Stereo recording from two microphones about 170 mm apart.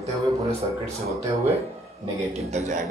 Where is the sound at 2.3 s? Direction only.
40° right (ahead or behind).